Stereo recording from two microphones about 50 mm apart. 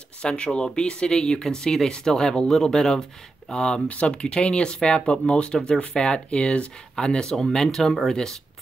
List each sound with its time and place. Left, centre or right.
0.2 s speech: centre
3.8 s speech: left